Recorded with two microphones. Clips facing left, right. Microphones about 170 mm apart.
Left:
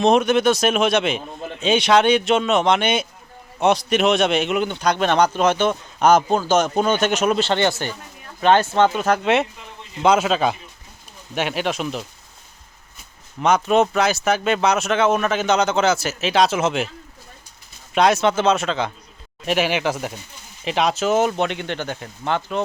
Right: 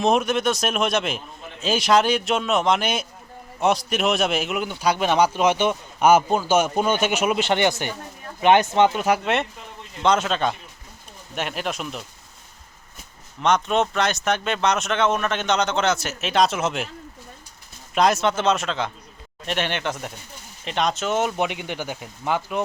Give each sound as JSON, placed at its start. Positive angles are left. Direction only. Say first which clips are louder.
{"t": 0.0, "sound": "a man's voice", "louder": "left 4 dB", "side_deg": 0}
{"t": 9.2, "sound": "a man's voice", "louder": "left 5 dB", "side_deg": 0}
{"t": 13.4, "sound": "speech", "louder": "left 4 dB", "side_deg": 5}
{"t": 17.9, "sound": "speech", "louder": "left 3 dB", "side_deg": 0}
{"t": 21.3, "sound": "a man's voice", "louder": "left 2 dB", "side_deg": -10}